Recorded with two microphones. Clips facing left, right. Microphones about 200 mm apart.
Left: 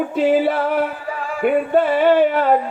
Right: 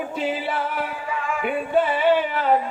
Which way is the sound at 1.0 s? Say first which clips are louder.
Left 1 dB; 35° left (ahead or behind).